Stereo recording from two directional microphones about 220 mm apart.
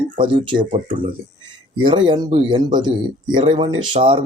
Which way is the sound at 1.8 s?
20° right (ahead or behind).